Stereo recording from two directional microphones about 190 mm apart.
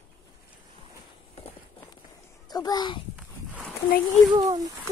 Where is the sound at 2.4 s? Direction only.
20° left (ahead or behind).